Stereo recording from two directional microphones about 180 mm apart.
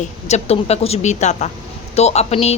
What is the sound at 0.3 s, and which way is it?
Speech, 35° left (ahead or behind).